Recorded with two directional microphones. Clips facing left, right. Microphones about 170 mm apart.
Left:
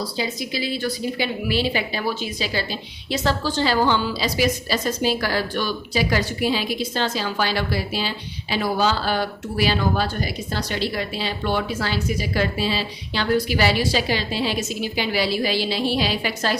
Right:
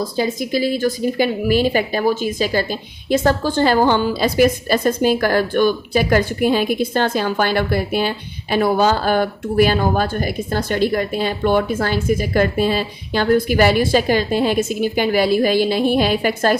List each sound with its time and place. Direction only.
0.0 s a woman's voice: 50° right (ahead or behind)